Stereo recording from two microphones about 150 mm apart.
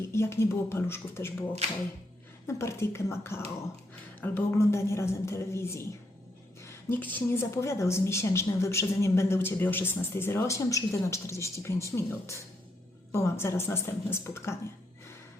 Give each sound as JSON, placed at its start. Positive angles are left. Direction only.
{"t": 0.1, "sound": "a woman's voice", "side_deg": 15}
{"t": 2.5, "sound": "a woman's voice", "side_deg": 20}